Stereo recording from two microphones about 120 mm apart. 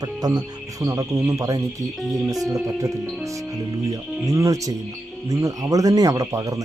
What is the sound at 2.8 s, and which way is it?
Speech, 25° right (ahead or behind).